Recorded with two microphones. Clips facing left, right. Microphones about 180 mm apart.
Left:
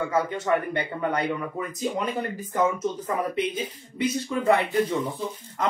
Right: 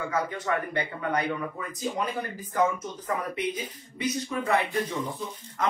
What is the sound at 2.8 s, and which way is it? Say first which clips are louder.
Speech: left 5 dB; 25° left (ahead or behind).